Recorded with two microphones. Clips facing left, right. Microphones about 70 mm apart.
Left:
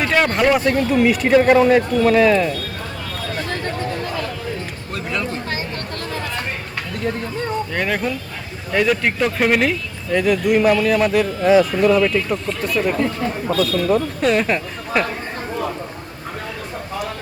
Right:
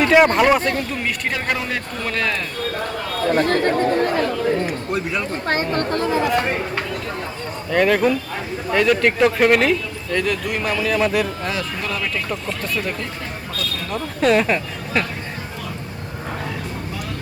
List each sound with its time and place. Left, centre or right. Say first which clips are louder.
0.0 s speech: right 3 dB; centre
3.3 s chatter: right 8 dB; right
4.9 s speech: right 2 dB; centre
5.5 s speech: right 6 dB; right
7.7 s speech: right 5 dB; centre
14.2 s speech: right 1 dB; centre